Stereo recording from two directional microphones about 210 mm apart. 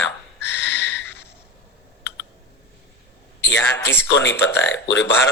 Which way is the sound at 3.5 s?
60° left (ahead or behind).